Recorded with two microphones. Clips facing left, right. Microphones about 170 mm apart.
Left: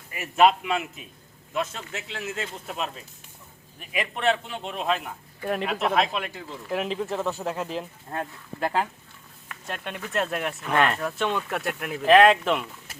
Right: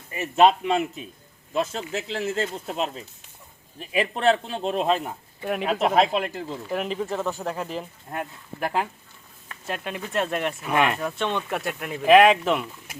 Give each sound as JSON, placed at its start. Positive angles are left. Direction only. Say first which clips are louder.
{"t": 0.1, "sound": "a man's voice", "louder": "right 2 dB", "side_deg": -25}
{"t": 5.4, "sound": "speech", "louder": "even", "side_deg": -5}
{"t": 5.9, "sound": "speech", "louder": "right 4 dB", "side_deg": -40}
{"t": 6.7, "sound": "speech", "louder": "left 1 dB", "side_deg": 0}
{"t": 8.1, "sound": "speech", "louder": "even", "side_deg": -15}
{"t": 11.2, "sound": "speech", "louder": "even", "side_deg": 5}
{"t": 12.0, "sound": "speech", "louder": "right 1 dB", "side_deg": -10}